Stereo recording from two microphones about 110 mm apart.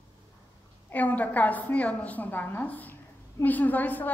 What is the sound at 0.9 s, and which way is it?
A woman's voice, 15° left (ahead or behind).